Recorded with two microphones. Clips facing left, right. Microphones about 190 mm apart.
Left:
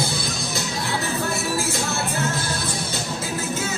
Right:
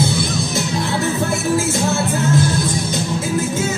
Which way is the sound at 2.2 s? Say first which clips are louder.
Right 9 dB; 15° right (ahead or behind).